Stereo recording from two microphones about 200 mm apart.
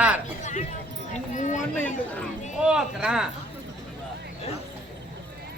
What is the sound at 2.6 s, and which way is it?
Speech, 5° right (ahead or behind).